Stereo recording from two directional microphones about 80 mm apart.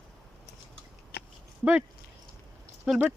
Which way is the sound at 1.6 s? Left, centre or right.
Centre.